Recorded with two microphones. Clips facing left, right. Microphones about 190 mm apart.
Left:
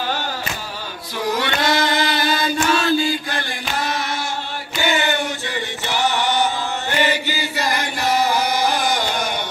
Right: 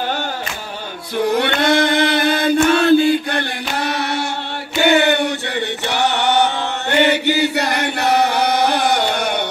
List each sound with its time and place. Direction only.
1.1 s singing: 60° right (ahead or behind)
4.7 s chant: 65° right (ahead or behind)